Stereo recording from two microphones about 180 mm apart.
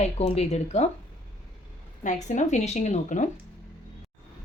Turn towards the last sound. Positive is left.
turn(degrees=40)  # may be behind; listen again after turning